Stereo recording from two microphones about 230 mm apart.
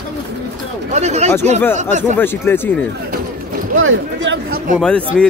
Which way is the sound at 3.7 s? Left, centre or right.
Right.